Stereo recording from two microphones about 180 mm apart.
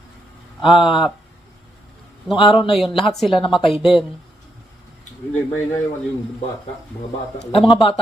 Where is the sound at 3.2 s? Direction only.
30° left (ahead or behind).